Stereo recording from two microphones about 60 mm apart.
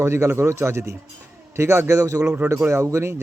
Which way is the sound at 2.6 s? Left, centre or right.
Right.